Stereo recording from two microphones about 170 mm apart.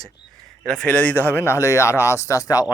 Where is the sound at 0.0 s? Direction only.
5° left (ahead or behind).